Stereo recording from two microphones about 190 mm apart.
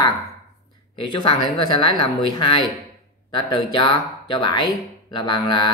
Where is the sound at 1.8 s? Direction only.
25° left (ahead or behind).